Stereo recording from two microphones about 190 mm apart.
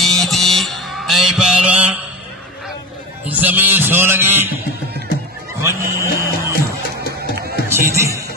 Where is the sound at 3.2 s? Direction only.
10° right (ahead or behind).